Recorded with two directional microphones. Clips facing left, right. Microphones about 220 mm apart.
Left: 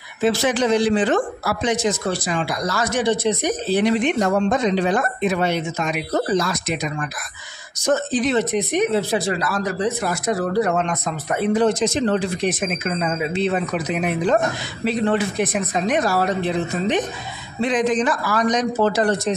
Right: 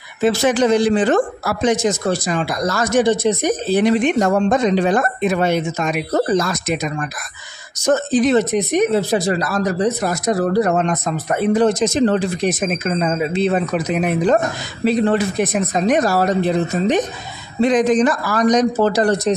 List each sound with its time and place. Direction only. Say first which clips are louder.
0.2 s speech: right 3 dB; 45° right (ahead or behind)